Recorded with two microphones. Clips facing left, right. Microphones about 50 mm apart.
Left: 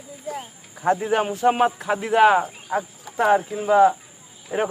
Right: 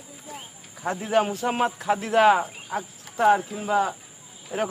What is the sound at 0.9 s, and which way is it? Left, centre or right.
Speech, centre.